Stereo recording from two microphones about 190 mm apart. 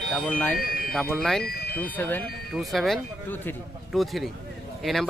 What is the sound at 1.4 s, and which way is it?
Speech, 55° left (ahead or behind).